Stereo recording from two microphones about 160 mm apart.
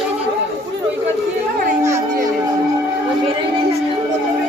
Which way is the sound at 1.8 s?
20° right (ahead or behind).